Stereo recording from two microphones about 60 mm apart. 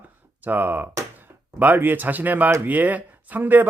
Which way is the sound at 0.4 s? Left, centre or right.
Right.